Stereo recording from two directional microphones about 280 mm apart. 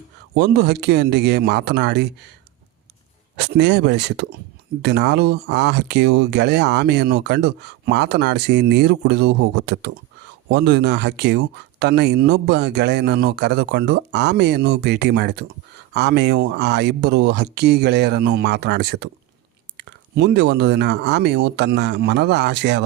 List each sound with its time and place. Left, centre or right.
0.3 s speech: right
3.3 s speech: right